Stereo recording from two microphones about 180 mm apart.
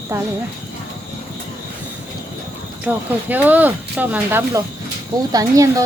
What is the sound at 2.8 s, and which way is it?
Speech, 10° right (ahead or behind).